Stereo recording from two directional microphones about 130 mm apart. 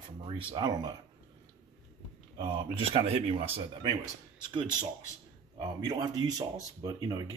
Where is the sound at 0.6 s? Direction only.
35° right (ahead or behind).